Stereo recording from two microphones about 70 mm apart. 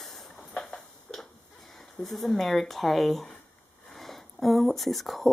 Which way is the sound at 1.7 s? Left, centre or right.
Centre.